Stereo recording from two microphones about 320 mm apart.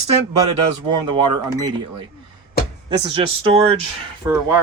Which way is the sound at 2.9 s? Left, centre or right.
Centre.